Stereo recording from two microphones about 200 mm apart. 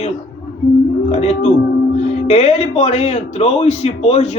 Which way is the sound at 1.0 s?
30° left (ahead or behind).